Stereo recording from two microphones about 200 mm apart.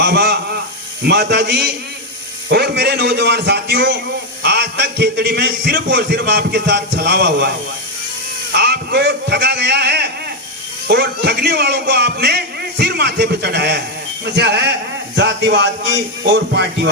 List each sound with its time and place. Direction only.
0.0 s a man's voice: 55° right (ahead or behind)
8.5 s a man's voice: 55° right (ahead or behind)